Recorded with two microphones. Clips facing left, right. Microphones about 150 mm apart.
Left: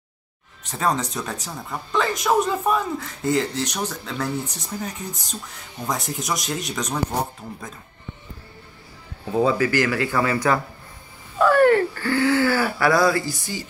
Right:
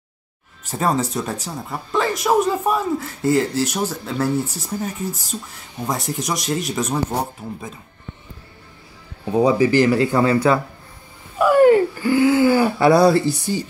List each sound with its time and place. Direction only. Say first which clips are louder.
0.7 s speech: right 3 dB; 5° right (ahead or behind)
9.2 s speech: right 4 dB; 15° right (ahead or behind)